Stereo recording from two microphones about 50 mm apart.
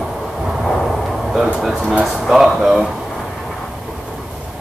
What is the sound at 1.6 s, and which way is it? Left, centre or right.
Speech, centre.